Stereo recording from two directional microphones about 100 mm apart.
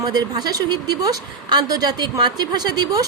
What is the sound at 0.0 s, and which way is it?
A woman's voice, 40° right (ahead or behind).